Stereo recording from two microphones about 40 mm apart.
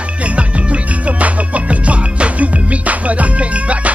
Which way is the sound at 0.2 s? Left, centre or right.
Right.